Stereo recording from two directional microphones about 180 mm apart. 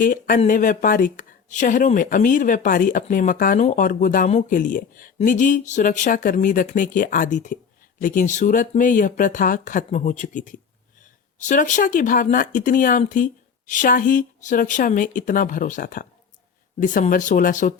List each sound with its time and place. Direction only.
0.0 s speech: 50° left (ahead or behind)